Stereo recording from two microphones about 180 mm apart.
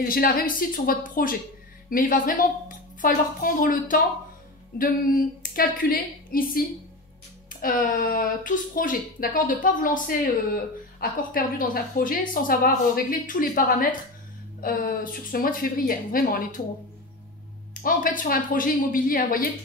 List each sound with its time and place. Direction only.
0.1 s speech: 55° left (ahead or behind)
7.6 s speech: 50° left (ahead or behind)
17.8 s speech: 50° left (ahead or behind)